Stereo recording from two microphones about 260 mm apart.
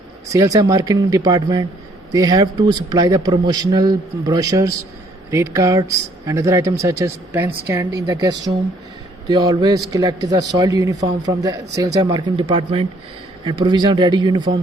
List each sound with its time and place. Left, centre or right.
0.3 s speech: centre